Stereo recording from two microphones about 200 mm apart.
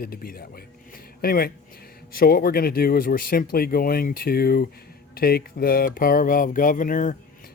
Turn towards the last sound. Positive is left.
turn(degrees=40)  # may be behind; listen again after turning